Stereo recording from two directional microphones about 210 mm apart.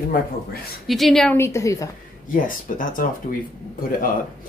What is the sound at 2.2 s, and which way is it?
Speech, 40° left (ahead or behind).